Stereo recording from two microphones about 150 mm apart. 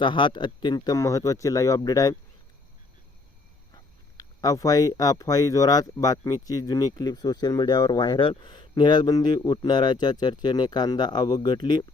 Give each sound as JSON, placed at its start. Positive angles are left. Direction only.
{"t": 0.0, "sound": "speech", "side_deg": 35}
{"t": 4.2, "sound": "speech", "side_deg": 25}